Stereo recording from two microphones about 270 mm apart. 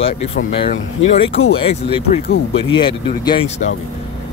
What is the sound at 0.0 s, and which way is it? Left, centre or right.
Speech, left.